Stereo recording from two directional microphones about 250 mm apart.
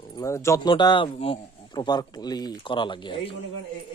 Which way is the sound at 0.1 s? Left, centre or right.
Centre.